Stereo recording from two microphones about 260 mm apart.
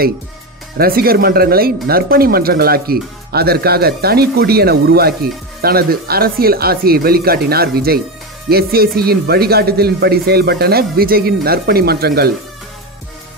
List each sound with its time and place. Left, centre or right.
0.7 s speech: right